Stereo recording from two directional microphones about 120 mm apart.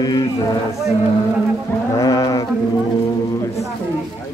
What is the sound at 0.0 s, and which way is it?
Speech, 35° left (ahead or behind).